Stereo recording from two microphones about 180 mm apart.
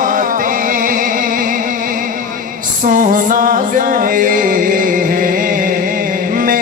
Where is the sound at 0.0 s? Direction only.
50° right (ahead or behind).